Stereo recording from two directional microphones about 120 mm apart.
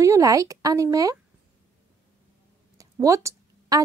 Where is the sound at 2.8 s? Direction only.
25° right (ahead or behind).